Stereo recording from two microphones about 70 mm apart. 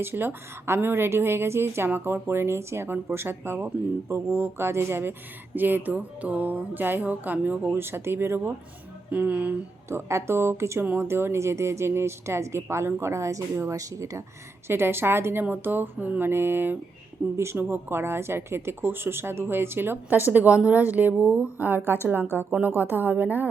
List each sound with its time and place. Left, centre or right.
0.0 s speech: right
9.1 s speech: right
9.9 s speech: right
14.7 s speech: right
22.4 s speech: centre
22.7 s speech: right